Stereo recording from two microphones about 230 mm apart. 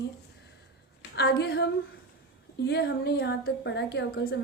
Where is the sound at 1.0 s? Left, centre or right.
Left.